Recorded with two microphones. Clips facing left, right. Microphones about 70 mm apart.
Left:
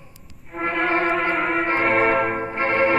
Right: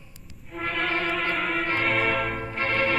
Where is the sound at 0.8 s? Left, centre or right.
Left.